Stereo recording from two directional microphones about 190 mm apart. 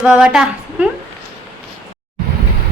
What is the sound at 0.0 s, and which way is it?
Speech, 5° right (ahead or behind).